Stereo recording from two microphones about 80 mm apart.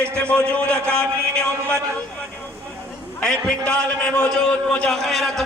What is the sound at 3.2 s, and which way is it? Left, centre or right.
A man's voice, centre.